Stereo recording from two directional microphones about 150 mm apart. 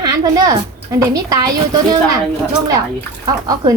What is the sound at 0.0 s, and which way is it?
A woman's voice, 25° right (ahead or behind).